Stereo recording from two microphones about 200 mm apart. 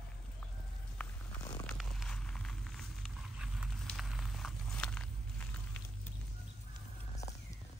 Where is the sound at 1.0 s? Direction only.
5° left (ahead or behind).